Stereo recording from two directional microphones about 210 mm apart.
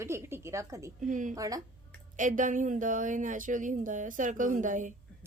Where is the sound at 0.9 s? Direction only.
35° right (ahead or behind).